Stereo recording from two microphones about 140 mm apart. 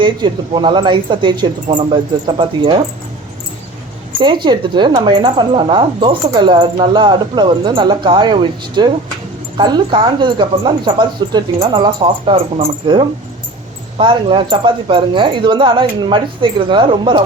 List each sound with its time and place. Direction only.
0.0 s speech: 35° right (ahead or behind)
4.2 s speech: 35° right (ahead or behind)
12.0 s speech: 45° right (ahead or behind)